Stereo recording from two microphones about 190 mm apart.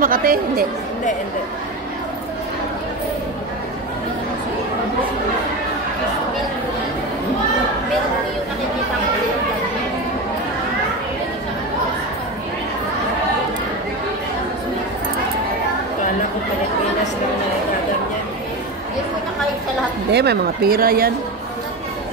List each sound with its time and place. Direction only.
0.0 s speech: 50° right (ahead or behind)
20.1 s speech: 60° right (ahead or behind)